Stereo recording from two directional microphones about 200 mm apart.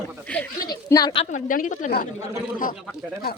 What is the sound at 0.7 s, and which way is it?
Speech, 20° left (ahead or behind).